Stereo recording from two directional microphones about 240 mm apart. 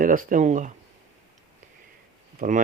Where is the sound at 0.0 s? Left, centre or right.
Right.